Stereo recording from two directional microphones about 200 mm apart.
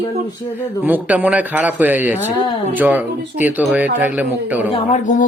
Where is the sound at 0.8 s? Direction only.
10° right (ahead or behind).